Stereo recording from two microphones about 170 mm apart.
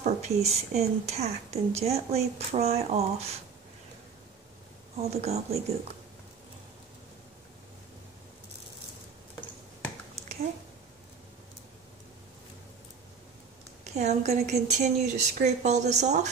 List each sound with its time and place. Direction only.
0.0 s a sound: 40° right (ahead or behind)
0.5 s speech: 40° right (ahead or behind)
5.0 s speech: 40° right (ahead or behind)
13.9 s speech: 40° right (ahead or behind)